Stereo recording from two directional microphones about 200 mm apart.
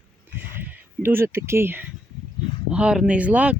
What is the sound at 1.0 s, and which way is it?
Speech, 10° right (ahead or behind).